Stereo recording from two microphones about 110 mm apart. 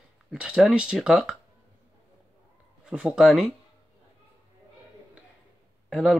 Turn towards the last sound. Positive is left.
turn(degrees=5)  # may be behind; listen again after turning